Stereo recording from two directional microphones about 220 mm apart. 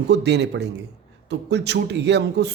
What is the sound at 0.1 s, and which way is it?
Speech, 50° right (ahead or behind).